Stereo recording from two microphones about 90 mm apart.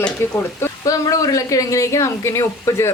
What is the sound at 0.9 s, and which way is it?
A woman's voice, 40° left (ahead or behind).